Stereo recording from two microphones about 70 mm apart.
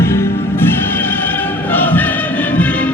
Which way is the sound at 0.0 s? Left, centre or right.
Left.